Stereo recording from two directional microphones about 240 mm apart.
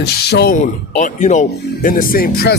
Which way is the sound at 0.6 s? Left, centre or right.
Left.